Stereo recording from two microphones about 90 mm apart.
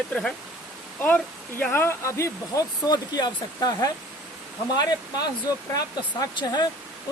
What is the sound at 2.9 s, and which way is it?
Speech, 45° left (ahead or behind).